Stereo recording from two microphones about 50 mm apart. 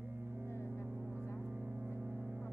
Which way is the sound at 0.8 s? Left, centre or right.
Right.